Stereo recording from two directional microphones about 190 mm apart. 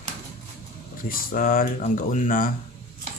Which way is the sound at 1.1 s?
45° left (ahead or behind).